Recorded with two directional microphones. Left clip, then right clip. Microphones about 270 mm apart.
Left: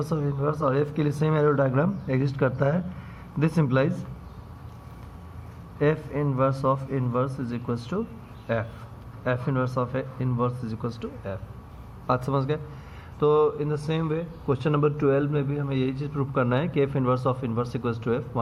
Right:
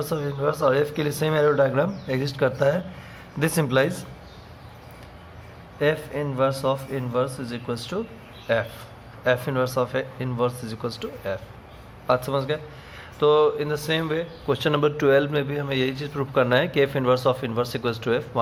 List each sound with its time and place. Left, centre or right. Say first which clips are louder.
0.0 s a man's voice: right 3 dB; centre
5.8 s a man's voice: right 2 dB; centre